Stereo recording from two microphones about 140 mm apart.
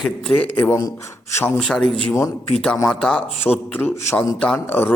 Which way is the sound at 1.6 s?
5° left (ahead or behind).